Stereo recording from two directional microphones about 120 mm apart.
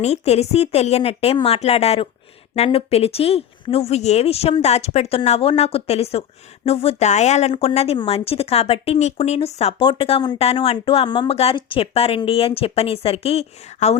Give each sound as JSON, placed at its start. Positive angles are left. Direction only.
{"t": 0.0, "sound": "a woman's voice", "side_deg": 60}
{"t": 7.5, "sound": "a woman's voice", "side_deg": 60}
{"t": 9.8, "sound": "speech", "side_deg": 45}
{"t": 11.3, "sound": "speech", "side_deg": 55}